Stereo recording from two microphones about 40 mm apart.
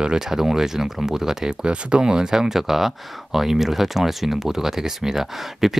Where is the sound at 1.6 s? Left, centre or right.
Right.